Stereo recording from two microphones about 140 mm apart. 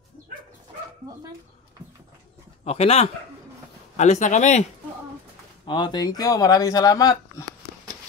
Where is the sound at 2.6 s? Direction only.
45° left (ahead or behind).